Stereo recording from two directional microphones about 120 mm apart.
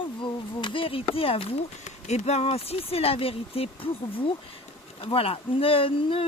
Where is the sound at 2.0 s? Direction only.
65° left (ahead or behind).